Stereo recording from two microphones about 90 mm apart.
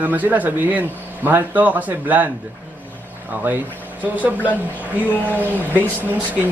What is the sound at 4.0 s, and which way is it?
Speech, 20° right (ahead or behind).